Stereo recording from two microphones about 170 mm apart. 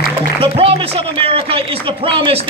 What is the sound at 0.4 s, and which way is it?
A man's voice, 35° right (ahead or behind).